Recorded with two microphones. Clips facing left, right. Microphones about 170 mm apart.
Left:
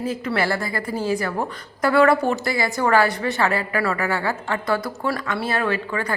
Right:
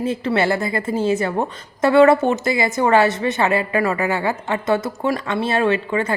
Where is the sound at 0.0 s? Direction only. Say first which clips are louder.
Right 4 dB; 25° right (ahead or behind).